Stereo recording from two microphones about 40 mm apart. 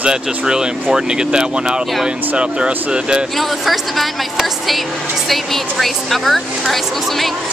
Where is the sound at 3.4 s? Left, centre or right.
Centre.